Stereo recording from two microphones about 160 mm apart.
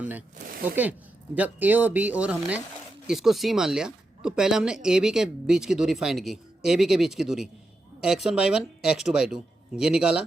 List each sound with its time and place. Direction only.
0.0 s speech: 10° right (ahead or behind)
0.3 s speech: 55° right (ahead or behind)
1.4 s speech: 10° right (ahead or behind)